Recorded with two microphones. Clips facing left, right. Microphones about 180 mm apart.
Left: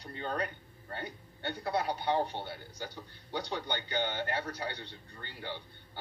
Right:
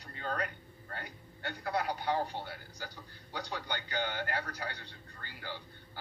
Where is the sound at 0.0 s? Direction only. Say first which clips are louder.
Left 2 dB; 25° left (ahead or behind).